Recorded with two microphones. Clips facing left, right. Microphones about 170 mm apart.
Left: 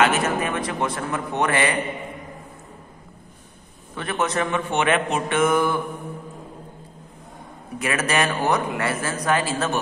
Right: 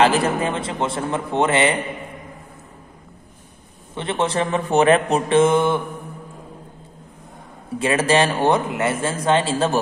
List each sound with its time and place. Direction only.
0.0 s speech: 30° right (ahead or behind)
3.9 s speech: 25° right (ahead or behind)
7.8 s speech: 30° right (ahead or behind)